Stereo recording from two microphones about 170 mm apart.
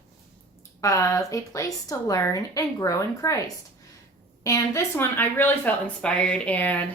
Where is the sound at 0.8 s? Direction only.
20° left (ahead or behind).